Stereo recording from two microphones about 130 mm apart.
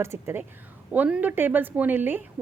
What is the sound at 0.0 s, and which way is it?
Speech, 20° right (ahead or behind).